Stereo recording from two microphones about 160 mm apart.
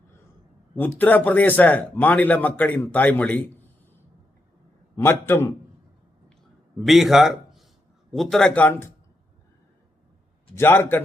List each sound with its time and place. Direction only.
0.8 s a man's voice: 10° left (ahead or behind)
5.0 s a man's voice: 15° left (ahead or behind)
6.7 s a man's voice: centre (ahead or behind)
10.6 s a man's voice: 15° left (ahead or behind)